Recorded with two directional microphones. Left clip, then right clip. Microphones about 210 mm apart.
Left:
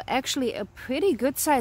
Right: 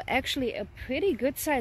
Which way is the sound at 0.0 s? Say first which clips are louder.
Left 2 dB; 10° left (ahead or behind).